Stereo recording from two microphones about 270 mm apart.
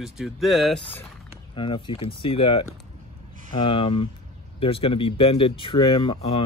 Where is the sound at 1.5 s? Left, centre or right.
Centre.